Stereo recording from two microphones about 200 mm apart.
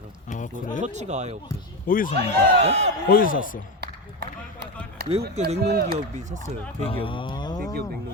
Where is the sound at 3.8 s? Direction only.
55° right (ahead or behind).